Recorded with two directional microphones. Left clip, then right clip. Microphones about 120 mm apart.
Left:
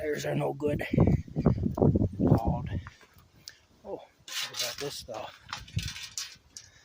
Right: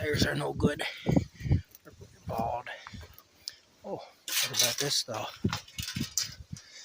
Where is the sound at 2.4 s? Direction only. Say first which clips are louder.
Right 2 dB; 40° left (ahead or behind).